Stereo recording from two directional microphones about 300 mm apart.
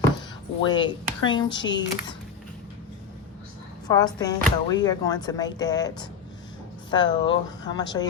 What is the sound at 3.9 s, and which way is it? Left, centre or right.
Speech, centre.